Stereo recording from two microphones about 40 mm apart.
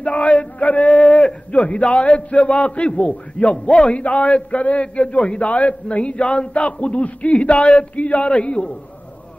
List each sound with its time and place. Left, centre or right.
0.0 s male singing: left
1.5 s a man's voice: left